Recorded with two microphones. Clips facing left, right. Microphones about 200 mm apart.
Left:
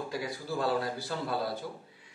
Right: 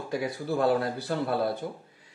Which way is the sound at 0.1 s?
60° right (ahead or behind).